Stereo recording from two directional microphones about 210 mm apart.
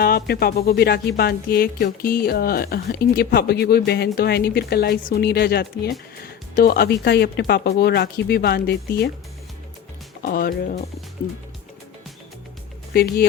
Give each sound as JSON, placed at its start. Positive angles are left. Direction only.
{"t": 0.0, "sound": "speech", "side_deg": 45}
{"t": 10.2, "sound": "speech", "side_deg": 45}
{"t": 12.9, "sound": "speech", "side_deg": 45}